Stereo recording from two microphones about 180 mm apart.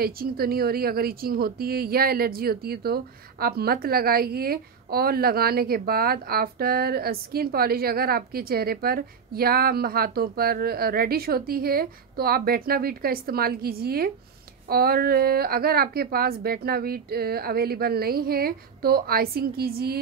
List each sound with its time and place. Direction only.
0.0 s speech: 55° right (ahead or behind)